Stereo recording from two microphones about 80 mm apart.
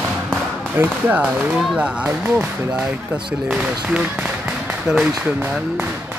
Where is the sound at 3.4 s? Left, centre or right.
Centre.